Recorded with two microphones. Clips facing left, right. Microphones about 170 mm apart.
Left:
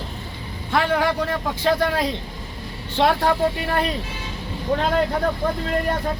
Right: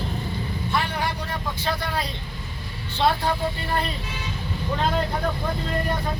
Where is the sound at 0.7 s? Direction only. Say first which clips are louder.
Left 8 dB; 90° left.